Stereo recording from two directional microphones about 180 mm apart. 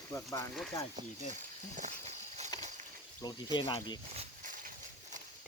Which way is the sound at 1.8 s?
40° right (ahead or behind).